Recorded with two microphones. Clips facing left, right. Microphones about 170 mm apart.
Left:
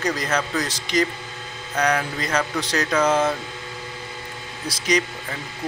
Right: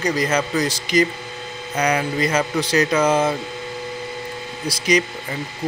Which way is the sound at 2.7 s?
20° right (ahead or behind).